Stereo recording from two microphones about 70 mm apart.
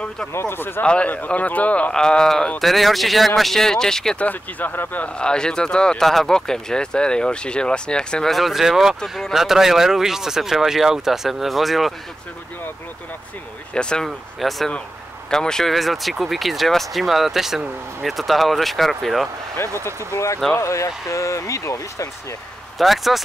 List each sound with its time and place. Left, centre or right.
0.3 s speech: left
0.8 s speech: centre
4.2 s speech: left
8.3 s speech: centre
13.7 s speech: centre
14.0 s speech: centre
20.5 s speech: left
22.8 s speech: centre